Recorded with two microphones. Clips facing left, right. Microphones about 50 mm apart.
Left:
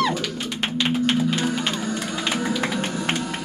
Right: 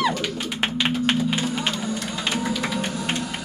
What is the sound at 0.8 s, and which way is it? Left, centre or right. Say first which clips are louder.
Music: left 2 dB; centre.